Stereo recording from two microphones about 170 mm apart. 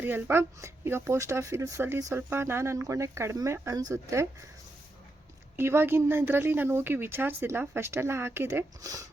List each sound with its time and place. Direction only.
0.0 s speech: 10° right (ahead or behind)
5.5 s speech: 15° right (ahead or behind)